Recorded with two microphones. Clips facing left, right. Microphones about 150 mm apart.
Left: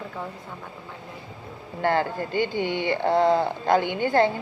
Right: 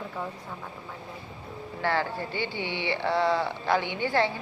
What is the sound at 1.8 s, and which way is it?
A woman's voice, 50° left (ahead or behind).